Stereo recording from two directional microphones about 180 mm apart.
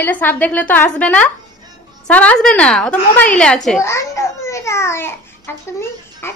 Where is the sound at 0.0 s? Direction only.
10° left (ahead or behind).